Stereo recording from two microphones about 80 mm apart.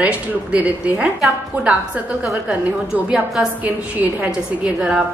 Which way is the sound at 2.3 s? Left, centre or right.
Centre.